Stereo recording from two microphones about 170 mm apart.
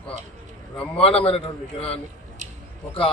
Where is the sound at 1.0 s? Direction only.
35° left (ahead or behind).